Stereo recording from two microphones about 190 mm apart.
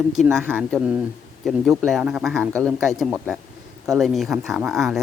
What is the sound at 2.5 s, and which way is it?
Speech, 15° right (ahead or behind).